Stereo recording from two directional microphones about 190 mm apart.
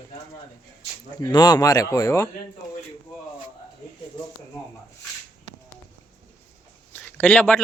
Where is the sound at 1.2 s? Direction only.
20° left (ahead or behind).